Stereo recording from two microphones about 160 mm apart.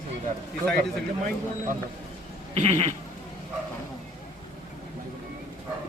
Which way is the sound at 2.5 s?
45° right (ahead or behind).